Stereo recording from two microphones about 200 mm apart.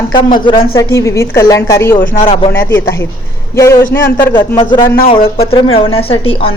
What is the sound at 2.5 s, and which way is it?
A woman's voice, 10° left (ahead or behind).